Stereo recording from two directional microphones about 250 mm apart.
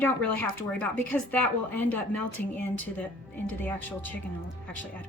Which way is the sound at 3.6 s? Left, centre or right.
Centre.